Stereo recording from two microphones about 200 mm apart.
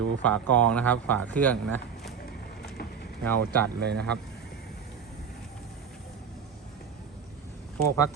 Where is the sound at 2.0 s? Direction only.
55° left (ahead or behind).